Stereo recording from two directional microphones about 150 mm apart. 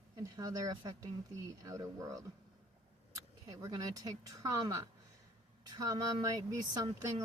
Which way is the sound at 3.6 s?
25° right (ahead or behind).